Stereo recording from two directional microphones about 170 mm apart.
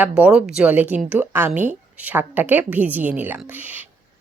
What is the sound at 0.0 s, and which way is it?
Speech, 5° right (ahead or behind).